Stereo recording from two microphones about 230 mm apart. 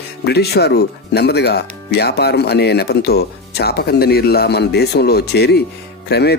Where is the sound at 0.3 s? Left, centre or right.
Left.